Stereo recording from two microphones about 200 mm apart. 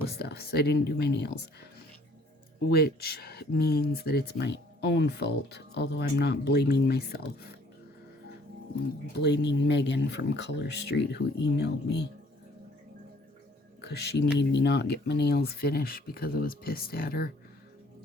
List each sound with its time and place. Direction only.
0.2 s speech: 55° left (ahead or behind)
2.6 s speech: 50° left (ahead or behind)
9.1 s speech: 55° left (ahead or behind)
13.8 s speech: 55° left (ahead or behind)